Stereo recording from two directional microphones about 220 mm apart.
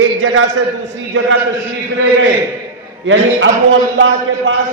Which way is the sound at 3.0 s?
60° right (ahead or behind).